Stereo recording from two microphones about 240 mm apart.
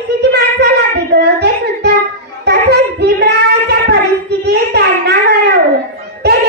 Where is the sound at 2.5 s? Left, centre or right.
Right.